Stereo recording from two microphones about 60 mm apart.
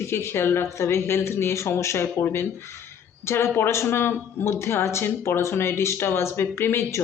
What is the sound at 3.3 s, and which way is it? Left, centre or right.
Speech, left.